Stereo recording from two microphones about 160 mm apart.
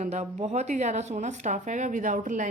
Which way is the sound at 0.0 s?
45° right (ahead or behind).